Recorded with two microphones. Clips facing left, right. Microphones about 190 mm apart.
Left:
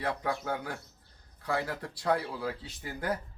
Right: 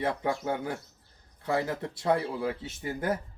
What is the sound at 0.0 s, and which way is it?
A man's voice, 25° right (ahead or behind).